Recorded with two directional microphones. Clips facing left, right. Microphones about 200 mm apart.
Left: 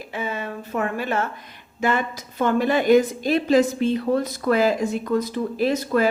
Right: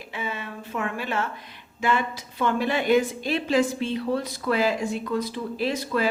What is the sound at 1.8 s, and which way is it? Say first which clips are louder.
A woman's voice: left 2 dB; 45° left (ahead or behind).